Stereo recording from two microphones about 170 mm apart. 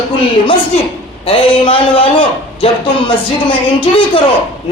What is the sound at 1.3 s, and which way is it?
A man's voice, 30° left (ahead or behind).